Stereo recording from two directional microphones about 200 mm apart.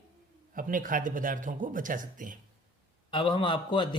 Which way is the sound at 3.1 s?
25° left (ahead or behind).